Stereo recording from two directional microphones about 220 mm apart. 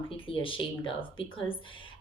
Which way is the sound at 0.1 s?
25° left (ahead or behind).